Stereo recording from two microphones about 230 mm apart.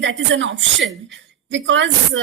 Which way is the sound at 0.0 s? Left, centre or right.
Right.